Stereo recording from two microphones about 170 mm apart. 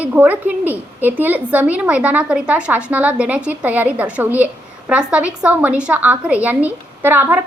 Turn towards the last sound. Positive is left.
turn(degrees=-10)  # may be behind; listen again after turning